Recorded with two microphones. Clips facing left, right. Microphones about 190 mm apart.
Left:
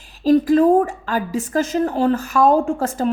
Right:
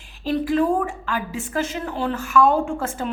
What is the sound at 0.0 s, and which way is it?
A woman's voice, 40° left (ahead or behind).